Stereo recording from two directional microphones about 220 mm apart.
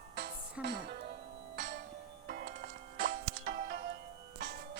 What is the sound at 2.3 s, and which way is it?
Music, 35° right (ahead or behind).